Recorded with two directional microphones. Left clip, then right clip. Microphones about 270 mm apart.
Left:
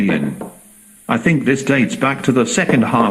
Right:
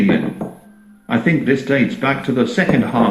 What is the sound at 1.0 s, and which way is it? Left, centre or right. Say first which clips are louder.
Speech: left 1 dB; left.